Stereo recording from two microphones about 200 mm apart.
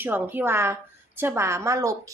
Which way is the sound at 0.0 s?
10° right (ahead or behind).